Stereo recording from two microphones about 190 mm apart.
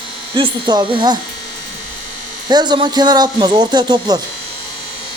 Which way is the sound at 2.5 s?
20° right (ahead or behind).